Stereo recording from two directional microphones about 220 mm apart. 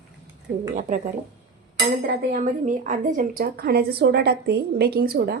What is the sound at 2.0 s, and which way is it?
A woman's voice, 40° right (ahead or behind).